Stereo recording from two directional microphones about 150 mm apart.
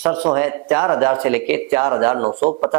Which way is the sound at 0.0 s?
10° right (ahead or behind).